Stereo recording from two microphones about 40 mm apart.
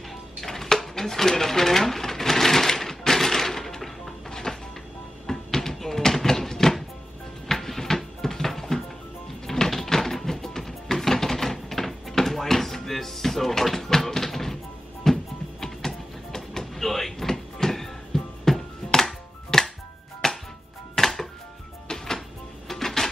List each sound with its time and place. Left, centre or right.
0.4 s dishes: centre
4.3 s music: centre
5.2 s a sound: centre
7.4 s music: centre
15.6 s vehicle: centre
20.2 s music: centre